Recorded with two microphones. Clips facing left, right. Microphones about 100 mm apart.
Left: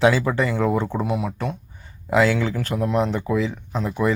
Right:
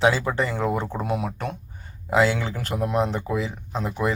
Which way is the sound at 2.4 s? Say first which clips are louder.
Left 3 dB; 35° right (ahead or behind).